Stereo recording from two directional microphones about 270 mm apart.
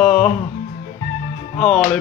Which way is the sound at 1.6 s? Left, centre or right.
Centre.